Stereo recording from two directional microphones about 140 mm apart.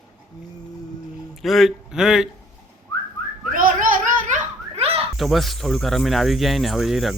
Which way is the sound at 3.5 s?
80° right.